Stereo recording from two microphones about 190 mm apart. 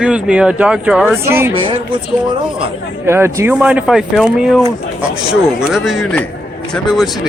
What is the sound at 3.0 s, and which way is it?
Speech, 15° right (ahead or behind).